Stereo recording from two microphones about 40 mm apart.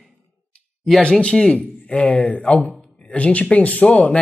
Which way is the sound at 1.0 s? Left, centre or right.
Left.